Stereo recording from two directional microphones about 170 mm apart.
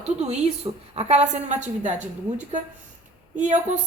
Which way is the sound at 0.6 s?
30° right (ahead or behind).